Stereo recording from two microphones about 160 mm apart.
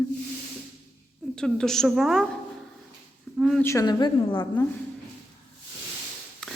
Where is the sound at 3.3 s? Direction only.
Centre (ahead or behind).